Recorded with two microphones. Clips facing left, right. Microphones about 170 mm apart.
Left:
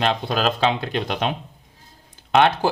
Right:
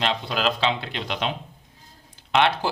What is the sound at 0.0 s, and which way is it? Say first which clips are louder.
Speech: left 3 dB; 50° left (ahead or behind).